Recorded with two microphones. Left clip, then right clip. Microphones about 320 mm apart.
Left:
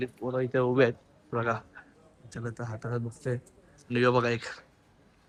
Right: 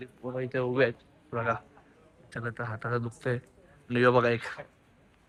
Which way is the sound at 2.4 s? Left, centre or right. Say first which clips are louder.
Right 3 dB; centre.